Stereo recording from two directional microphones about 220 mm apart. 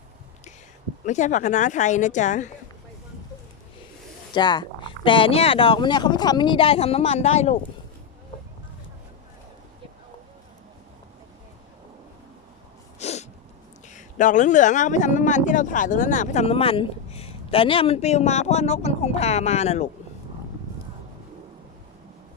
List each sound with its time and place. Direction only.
1.0 s speech: 35° left (ahead or behind)
4.4 s speech: 20° left (ahead or behind)
13.0 s sneeze: 30° left (ahead or behind)
13.8 s speech: 35° left (ahead or behind)